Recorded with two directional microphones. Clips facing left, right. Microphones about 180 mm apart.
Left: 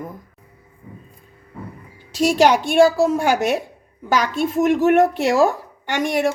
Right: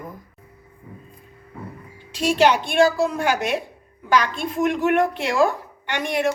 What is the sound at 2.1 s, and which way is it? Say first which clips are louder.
A woman's voice: left 3 dB; 40° left (ahead or behind).